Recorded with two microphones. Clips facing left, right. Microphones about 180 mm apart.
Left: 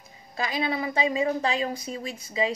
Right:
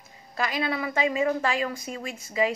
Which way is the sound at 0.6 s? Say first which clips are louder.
Left 1 dB; 20° left (ahead or behind).